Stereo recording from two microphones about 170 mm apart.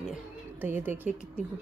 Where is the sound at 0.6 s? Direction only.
10° right (ahead or behind).